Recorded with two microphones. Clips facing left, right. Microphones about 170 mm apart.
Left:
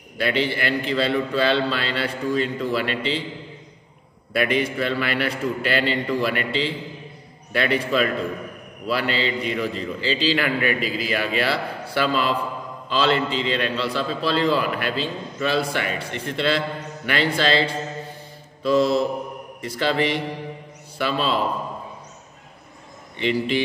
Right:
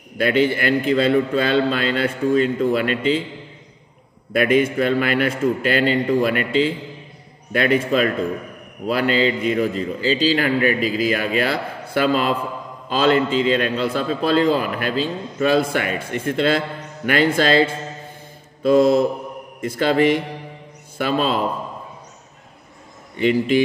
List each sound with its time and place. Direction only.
0.2 s a man's voice: 45° right (ahead or behind)
4.3 s a man's voice: 45° right (ahead or behind)
23.1 s a man's voice: 45° right (ahead or behind)